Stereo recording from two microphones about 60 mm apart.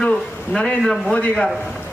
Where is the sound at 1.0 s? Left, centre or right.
Left.